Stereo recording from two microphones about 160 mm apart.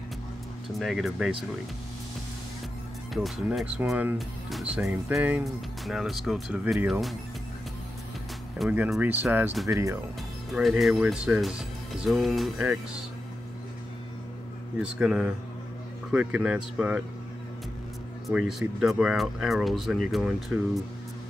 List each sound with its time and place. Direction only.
0.7 s speech: centre (ahead or behind)
3.1 s speech: centre (ahead or behind)
8.5 s speech: 10° right (ahead or behind)
10.5 s speech: centre (ahead or behind)
14.8 s speech: 5° right (ahead or behind)
18.2 s speech: centre (ahead or behind)